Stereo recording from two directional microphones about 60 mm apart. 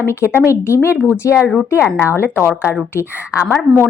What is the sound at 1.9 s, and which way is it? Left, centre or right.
Speech, left.